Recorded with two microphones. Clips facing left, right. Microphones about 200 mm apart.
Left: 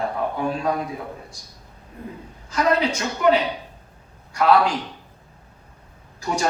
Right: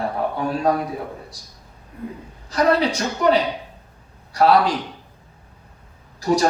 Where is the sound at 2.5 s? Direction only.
35° right (ahead or behind).